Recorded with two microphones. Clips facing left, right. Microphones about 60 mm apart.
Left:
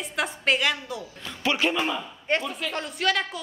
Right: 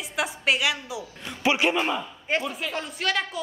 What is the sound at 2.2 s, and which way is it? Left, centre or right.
A woman's voice, centre.